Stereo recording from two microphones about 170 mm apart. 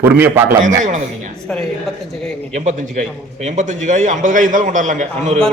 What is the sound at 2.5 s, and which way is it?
A man's voice, 45° right (ahead or behind).